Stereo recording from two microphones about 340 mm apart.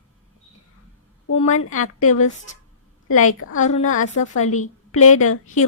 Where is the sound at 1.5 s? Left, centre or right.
Left.